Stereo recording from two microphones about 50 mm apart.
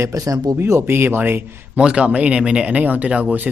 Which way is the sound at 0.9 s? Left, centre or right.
Right.